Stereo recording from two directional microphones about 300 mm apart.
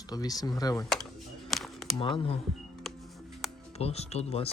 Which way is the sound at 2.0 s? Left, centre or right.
Centre.